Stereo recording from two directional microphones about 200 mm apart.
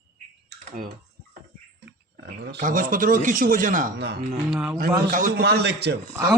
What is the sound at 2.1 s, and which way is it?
Speech, 50° right (ahead or behind).